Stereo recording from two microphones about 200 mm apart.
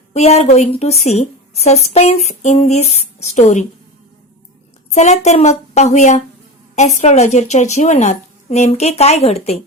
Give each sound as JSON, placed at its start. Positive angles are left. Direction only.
{"t": 0.1, "sound": "a woman's voice", "side_deg": 35}
{"t": 4.9, "sound": "a woman's voice", "side_deg": 35}